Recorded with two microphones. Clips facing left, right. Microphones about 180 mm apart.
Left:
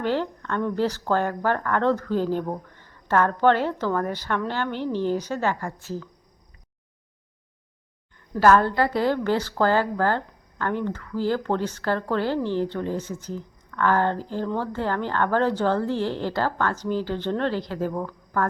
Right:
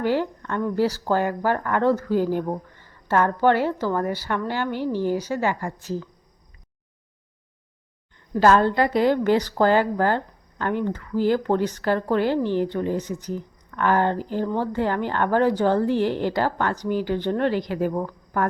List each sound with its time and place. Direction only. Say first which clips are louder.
0.0 s a woman's voice: right 2 dB; 10° right (ahead or behind)
8.3 s a woman's voice: right 1 dB; 20° right (ahead or behind)